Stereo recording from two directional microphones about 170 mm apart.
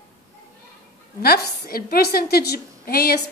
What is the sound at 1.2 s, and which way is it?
A woman's voice, 60° left (ahead or behind).